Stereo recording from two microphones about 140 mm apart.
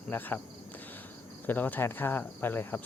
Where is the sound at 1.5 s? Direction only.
15° left (ahead or behind).